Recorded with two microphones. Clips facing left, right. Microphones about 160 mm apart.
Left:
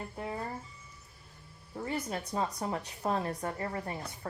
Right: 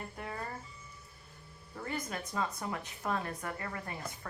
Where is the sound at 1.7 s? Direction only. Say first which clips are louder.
Left 4 dB; 25° left (ahead or behind).